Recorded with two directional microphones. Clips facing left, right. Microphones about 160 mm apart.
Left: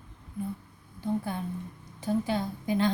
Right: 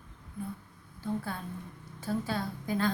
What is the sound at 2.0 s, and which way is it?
Speech, 20° left (ahead or behind).